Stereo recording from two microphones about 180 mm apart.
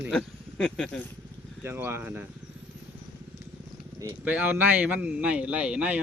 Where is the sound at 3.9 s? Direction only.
15° right (ahead or behind).